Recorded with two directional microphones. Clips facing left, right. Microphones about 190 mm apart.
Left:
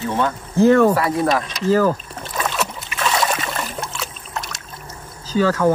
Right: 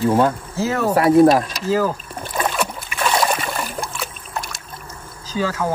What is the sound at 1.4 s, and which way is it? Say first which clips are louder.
Boat: left 3 dB; 10° right (ahead or behind).